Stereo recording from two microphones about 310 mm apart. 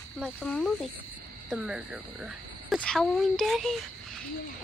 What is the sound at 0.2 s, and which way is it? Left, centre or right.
Speech, centre.